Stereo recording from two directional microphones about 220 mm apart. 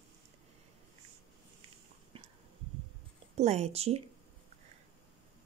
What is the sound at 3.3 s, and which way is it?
Speech, 30° right (ahead or behind).